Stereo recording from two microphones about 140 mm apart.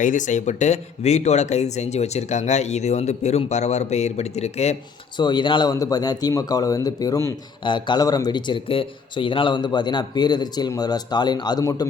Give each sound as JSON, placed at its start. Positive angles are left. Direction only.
{"t": 0.0, "sound": "speech", "side_deg": 65}
{"t": 5.1, "sound": "speech", "side_deg": 35}
{"t": 7.6, "sound": "speech", "side_deg": 35}